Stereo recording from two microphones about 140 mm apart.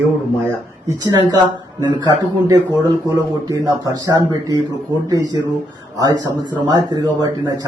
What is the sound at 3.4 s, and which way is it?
A man's voice, 25° right (ahead or behind).